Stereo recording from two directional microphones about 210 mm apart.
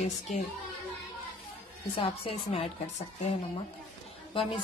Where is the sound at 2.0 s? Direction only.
25° left (ahead or behind).